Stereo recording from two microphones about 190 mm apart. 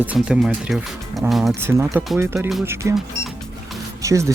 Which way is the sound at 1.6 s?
15° right (ahead or behind).